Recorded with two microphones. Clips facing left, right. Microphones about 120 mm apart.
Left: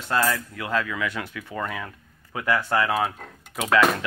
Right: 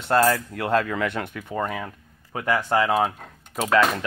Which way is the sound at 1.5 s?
30° right (ahead or behind).